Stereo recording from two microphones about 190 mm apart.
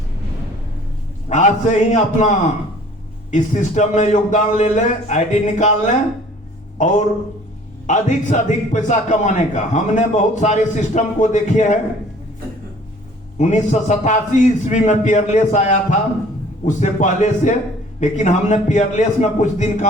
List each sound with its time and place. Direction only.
1.3 s a man's voice: 40° left (ahead or behind)
13.4 s a man's voice: 40° left (ahead or behind)